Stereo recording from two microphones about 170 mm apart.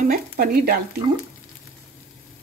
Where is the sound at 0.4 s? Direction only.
55° right (ahead or behind).